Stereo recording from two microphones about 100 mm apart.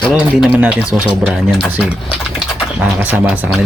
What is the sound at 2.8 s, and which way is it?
Speech, 15° right (ahead or behind).